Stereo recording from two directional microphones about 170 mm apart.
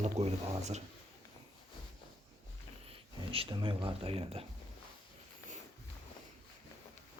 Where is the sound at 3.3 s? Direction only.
30° right (ahead or behind).